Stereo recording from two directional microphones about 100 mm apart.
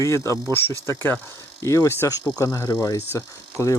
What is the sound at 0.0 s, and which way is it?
Speech, 30° left (ahead or behind).